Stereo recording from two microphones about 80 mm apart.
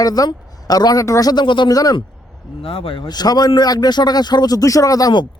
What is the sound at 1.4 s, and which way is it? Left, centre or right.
Speech, left.